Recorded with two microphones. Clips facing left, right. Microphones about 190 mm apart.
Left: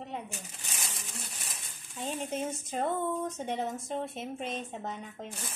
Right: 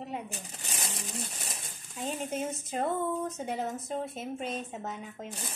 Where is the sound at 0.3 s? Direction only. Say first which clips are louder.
Right 2 dB; 35° right (ahead or behind).